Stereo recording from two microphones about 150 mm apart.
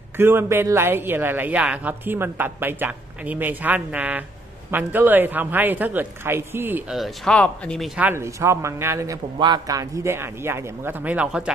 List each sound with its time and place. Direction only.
0.2 s speech: 15° right (ahead or behind)
6.9 s speech: centre (ahead or behind)
8.0 s speech: 15° right (ahead or behind)